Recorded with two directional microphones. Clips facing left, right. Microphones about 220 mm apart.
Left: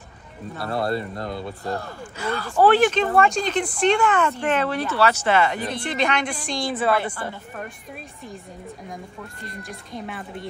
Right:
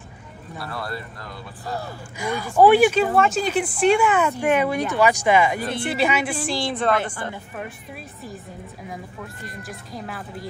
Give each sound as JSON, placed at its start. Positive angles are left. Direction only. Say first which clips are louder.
{"t": 0.7, "sound": "speech", "louder": "left 8 dB", "side_deg": 25}
{"t": 1.7, "sound": "speech", "louder": "right 1 dB", "side_deg": -10}
{"t": 9.6, "sound": "speech", "louder": "left 1 dB", "side_deg": 0}